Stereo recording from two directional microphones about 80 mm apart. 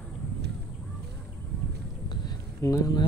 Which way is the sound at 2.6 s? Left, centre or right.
Left.